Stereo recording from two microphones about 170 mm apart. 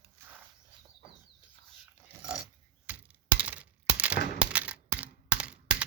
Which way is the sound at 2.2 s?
5° right (ahead or behind).